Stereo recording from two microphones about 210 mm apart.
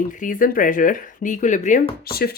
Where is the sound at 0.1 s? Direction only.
40° left (ahead or behind).